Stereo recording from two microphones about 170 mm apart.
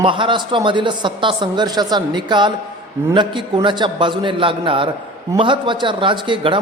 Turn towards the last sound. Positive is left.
turn(degrees=-30)  # may be behind; listen again after turning